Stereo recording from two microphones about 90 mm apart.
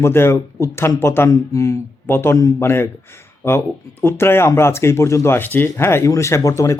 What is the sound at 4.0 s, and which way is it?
Speech, 25° left (ahead or behind).